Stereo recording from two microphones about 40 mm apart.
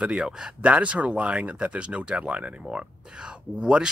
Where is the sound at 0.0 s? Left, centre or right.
Right.